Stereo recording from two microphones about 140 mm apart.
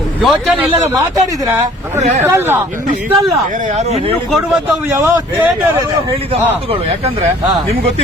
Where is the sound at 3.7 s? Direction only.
55° right (ahead or behind).